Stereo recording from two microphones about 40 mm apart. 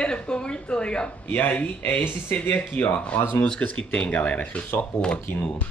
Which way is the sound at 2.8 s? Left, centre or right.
Left.